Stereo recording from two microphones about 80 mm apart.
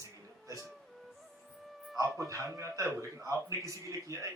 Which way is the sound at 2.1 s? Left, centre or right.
Right.